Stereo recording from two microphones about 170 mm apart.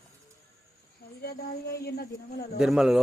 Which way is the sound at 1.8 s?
65° left (ahead or behind).